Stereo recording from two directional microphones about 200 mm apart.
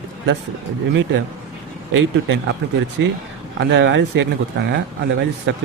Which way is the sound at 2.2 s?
65° right (ahead or behind).